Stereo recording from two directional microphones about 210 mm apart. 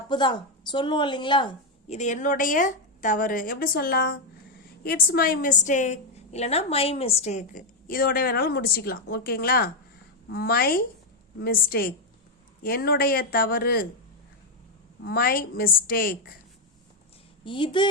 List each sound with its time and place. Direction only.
0.1 s a woman's voice: 20° left (ahead or behind); by 13.8 s 45° left (ahead or behind)
15.0 s a woman's voice: 45° left (ahead or behind)
17.4 s speech: 25° left (ahead or behind)